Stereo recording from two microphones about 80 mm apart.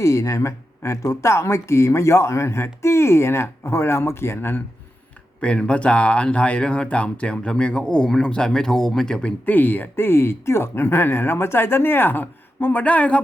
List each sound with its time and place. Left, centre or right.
0.0 s speech: left
5.4 s speech: centre
9.5 s speech: left